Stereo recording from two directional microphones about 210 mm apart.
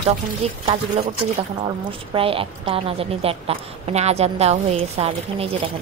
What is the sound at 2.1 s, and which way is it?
A woman's voice, 25° right (ahead or behind).